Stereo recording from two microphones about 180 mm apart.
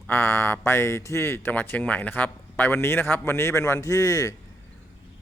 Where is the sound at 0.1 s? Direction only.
10° left (ahead or behind).